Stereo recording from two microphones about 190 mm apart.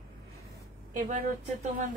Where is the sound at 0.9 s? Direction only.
40° right (ahead or behind).